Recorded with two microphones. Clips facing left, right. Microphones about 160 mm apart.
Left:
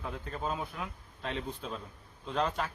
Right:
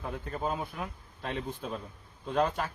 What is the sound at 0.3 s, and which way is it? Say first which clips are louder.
Speech: right 2 dB; 5° right (ahead or behind).